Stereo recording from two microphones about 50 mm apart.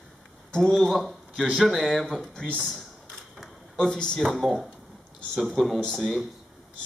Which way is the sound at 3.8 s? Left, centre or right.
Centre.